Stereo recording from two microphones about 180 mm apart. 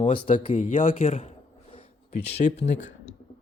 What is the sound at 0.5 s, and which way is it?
Speech, 45° left (ahead or behind).